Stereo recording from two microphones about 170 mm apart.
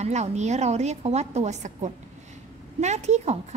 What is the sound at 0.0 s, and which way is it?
Speech, 40° right (ahead or behind).